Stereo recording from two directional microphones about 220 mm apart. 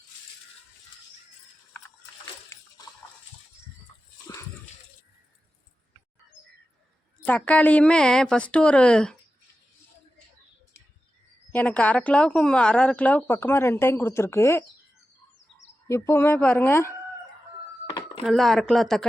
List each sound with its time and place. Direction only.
7.3 s speech: 5° left (ahead or behind)
11.5 s speech: 5° left (ahead or behind)
15.9 s speech: 10° left (ahead or behind)
17.8 s a sound: 20° left (ahead or behind)
18.2 s speech: centre (ahead or behind)